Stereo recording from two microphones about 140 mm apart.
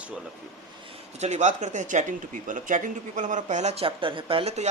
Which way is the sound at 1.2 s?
55° right (ahead or behind).